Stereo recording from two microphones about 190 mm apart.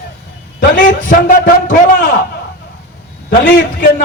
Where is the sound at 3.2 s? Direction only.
45° left (ahead or behind).